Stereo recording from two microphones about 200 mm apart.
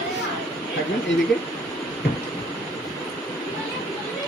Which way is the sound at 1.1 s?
65° left (ahead or behind).